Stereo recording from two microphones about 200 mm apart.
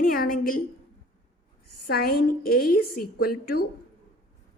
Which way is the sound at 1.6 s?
50° left (ahead or behind).